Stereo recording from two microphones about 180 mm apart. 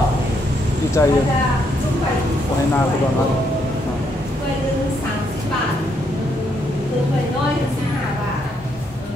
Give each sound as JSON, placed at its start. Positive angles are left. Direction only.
{"t": 1.0, "sound": "speech", "side_deg": 15}